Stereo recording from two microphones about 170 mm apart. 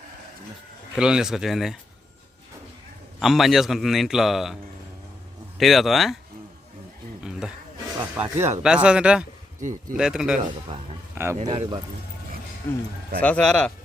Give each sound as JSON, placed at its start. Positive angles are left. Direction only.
{"t": 0.9, "sound": "a man's voice", "side_deg": -5}
{"t": 3.2, "sound": "a man's voice", "side_deg": 0}
{"t": 5.5, "sound": "a man's voice", "side_deg": 0}
{"t": 7.2, "sound": "a sound", "side_deg": -5}
{"t": 8.1, "sound": "a man's voice", "side_deg": -10}
{"t": 11.1, "sound": "a sound", "side_deg": -15}
{"t": 11.4, "sound": "speech", "side_deg": -30}
{"t": 13.1, "sound": "a man's voice", "side_deg": 5}